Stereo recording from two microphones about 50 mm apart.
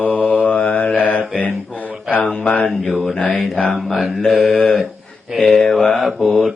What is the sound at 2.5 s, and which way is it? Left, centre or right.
Mantra, left.